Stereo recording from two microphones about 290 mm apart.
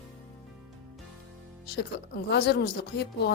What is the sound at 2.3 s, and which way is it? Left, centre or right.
A woman's voice, left.